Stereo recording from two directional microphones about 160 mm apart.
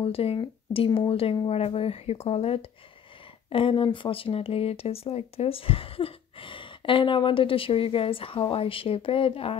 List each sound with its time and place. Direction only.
0.0 s speech: 35° left (ahead or behind)